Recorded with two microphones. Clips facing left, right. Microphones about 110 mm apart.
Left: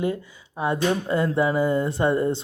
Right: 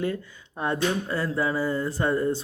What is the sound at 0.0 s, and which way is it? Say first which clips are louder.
Speech: left 3 dB; 10° left (ahead or behind).